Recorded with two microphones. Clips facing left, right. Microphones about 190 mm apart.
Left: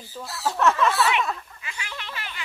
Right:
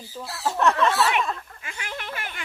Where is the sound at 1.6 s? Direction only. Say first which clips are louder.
Right 4 dB; 50° right (ahead or behind).